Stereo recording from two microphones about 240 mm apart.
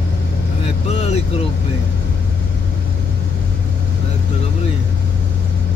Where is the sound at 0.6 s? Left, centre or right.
Left.